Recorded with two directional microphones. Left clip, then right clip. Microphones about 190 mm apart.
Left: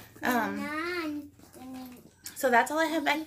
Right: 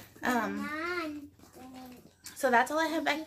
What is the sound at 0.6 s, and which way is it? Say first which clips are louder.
Speech: left 2 dB; 25° left (ahead or behind).